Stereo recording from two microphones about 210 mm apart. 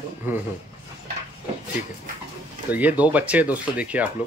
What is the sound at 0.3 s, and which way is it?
Speech, 10° right (ahead or behind).